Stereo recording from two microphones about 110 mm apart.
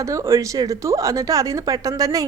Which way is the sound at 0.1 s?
30° right (ahead or behind).